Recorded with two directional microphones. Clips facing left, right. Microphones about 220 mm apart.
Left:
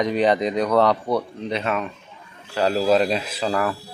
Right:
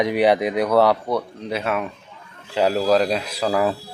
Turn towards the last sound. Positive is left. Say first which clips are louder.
# right 3 dB
turn(degrees=-20)  # may be behind; listen again after turning